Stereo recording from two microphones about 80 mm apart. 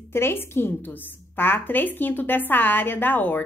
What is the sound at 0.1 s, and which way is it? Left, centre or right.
A woman's voice, left.